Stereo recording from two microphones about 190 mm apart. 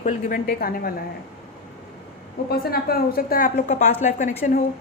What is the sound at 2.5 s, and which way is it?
A woman's voice, 55° left (ahead or behind).